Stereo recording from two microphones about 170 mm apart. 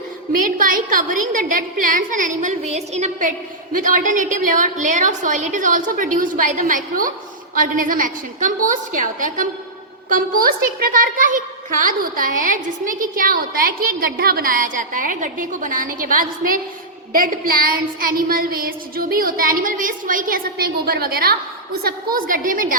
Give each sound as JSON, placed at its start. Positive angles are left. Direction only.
{"t": 0.6, "sound": "child singing", "side_deg": -55}
{"t": 1.9, "sound": "a child's voice", "side_deg": -50}
{"t": 17.2, "sound": "child singing", "side_deg": -55}
{"t": 21.8, "sound": "a child's voice", "side_deg": -55}